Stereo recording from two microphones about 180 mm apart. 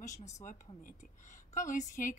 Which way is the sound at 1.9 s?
45° left (ahead or behind).